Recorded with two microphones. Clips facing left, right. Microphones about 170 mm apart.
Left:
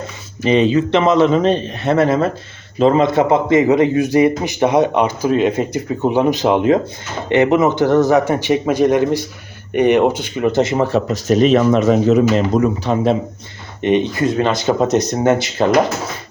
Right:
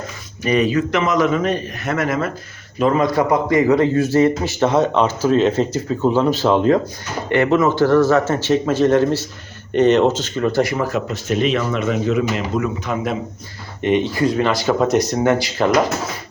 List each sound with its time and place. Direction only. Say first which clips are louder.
0.4 s a man's voice: left 3 dB; 25° left (ahead or behind)